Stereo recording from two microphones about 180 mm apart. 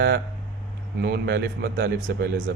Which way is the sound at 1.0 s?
70° right (ahead or behind).